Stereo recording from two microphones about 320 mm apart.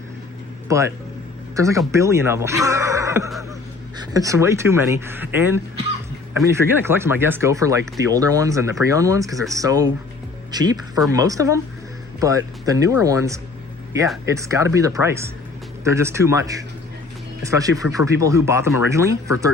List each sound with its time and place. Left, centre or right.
0.7 s speech: centre